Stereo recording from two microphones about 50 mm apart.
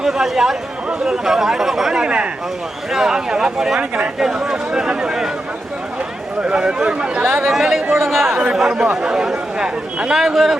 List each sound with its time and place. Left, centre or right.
0.0 s speech: centre
2.0 s speech: right
2.9 s speech: centre
3.8 s speech: right
4.4 s speech: centre
6.4 s speech: right
7.2 s speech: right
7.5 s speech: centre
8.4 s speech: centre
10.2 s speech: centre